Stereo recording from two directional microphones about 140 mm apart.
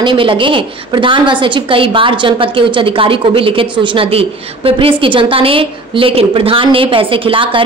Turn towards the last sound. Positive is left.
turn(degrees=-40)  # may be behind; listen again after turning